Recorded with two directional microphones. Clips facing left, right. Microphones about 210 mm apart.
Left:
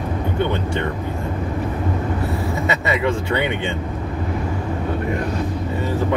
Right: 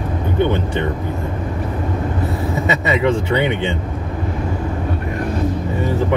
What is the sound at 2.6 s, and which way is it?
Speech, 20° right (ahead or behind).